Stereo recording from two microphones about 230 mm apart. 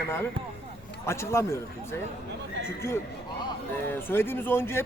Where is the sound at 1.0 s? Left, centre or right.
Centre.